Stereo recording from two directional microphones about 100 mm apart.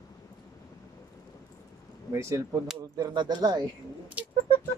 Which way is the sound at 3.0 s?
40° right (ahead or behind).